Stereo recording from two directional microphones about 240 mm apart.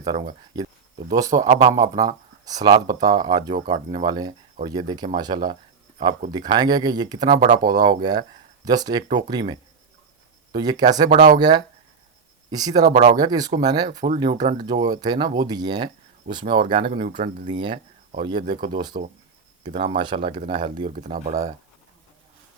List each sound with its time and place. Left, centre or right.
0.0 s speech: centre
11.1 s speech: right
11.3 s speech: centre
12.9 s speech: right
13.1 s speech: centre
16.9 s speech: right
17.4 s speech: right